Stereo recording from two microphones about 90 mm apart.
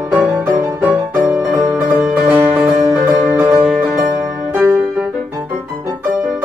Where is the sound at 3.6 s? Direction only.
10° right (ahead or behind).